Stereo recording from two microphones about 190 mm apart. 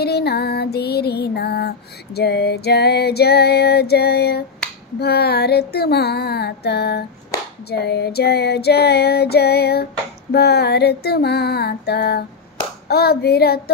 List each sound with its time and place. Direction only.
0.0 s female singing: 55° left (ahead or behind)